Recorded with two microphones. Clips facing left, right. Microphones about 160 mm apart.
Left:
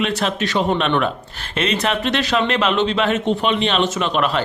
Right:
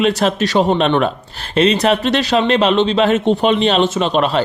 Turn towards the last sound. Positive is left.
turn(degrees=-30)  # may be behind; listen again after turning